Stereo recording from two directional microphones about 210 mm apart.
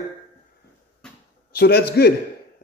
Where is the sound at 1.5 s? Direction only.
50° left (ahead or behind).